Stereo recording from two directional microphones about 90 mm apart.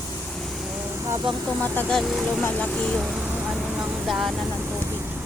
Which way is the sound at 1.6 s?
15° left (ahead or behind).